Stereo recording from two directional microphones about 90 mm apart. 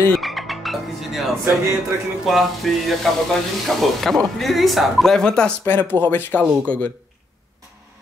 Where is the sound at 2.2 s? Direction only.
Centre (ahead or behind).